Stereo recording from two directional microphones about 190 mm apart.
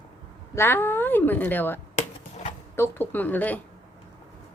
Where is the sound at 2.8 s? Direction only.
10° left (ahead or behind).